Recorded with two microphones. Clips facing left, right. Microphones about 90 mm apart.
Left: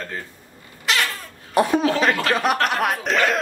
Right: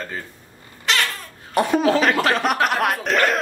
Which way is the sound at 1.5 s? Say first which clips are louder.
Right 1 dB; centre (ahead or behind).